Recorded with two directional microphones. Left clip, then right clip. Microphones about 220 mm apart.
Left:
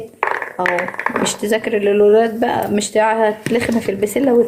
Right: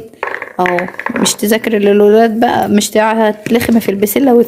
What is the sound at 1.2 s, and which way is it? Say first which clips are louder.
Speech: right 8 dB; 45° right (ahead or behind).